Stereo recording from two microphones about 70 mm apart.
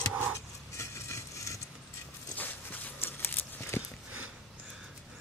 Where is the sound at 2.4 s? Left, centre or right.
Left.